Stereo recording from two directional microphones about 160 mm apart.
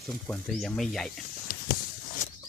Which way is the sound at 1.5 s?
65° left (ahead or behind).